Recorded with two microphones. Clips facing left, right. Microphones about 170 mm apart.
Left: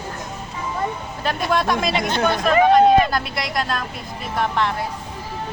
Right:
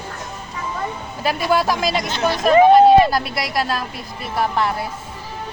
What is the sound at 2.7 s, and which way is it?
Speech, 5° right (ahead or behind).